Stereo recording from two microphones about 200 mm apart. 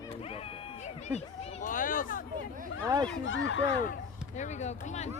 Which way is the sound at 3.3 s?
70° left (ahead or behind).